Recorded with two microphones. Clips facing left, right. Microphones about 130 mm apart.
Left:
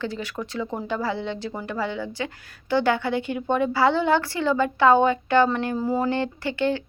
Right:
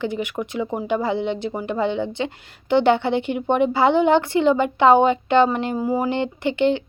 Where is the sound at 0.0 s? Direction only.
20° right (ahead or behind).